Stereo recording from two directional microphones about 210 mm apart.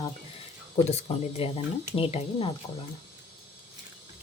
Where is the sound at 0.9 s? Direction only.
30° left (ahead or behind).